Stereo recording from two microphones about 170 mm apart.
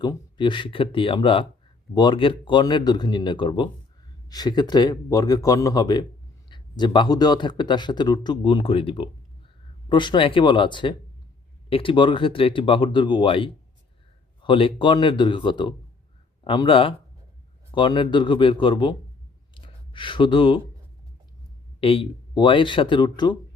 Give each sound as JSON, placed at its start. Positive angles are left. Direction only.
{"t": 0.0, "sound": "speech", "side_deg": 25}
{"t": 19.5, "sound": "a sound", "side_deg": 30}
{"t": 21.8, "sound": "speech", "side_deg": 35}